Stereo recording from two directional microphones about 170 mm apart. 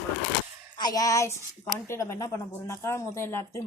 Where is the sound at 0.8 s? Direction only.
25° left (ahead or behind).